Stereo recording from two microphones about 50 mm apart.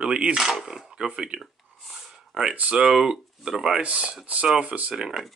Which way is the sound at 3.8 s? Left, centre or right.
Right.